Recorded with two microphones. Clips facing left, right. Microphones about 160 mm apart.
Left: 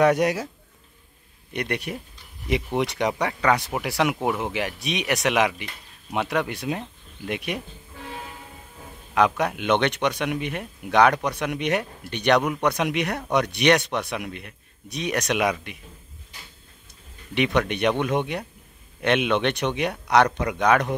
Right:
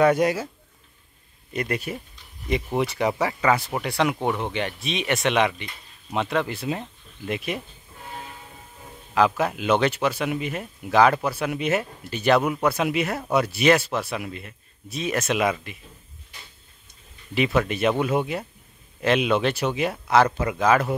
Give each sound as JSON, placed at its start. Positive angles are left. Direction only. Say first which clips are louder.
{"t": 0.0, "sound": "a man's voice", "louder": "even", "side_deg": 0}
{"t": 1.9, "sound": "a man's voice", "louder": "even", "side_deg": 0}
{"t": 9.1, "sound": "a man's voice", "louder": "even", "side_deg": 0}
{"t": 17.3, "sound": "a man's voice", "louder": "even", "side_deg": 0}